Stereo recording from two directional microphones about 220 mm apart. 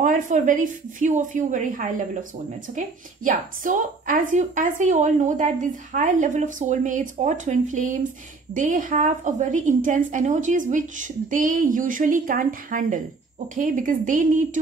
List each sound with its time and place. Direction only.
0.0 s a woman's voice: 35° right (ahead or behind)
3.3 s a woman's voice: 40° right (ahead or behind)